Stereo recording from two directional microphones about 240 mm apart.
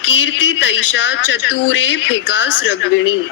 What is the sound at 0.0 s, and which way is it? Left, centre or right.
Speech, left.